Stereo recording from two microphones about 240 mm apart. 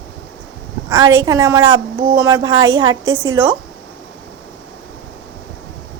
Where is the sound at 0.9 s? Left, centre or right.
Centre.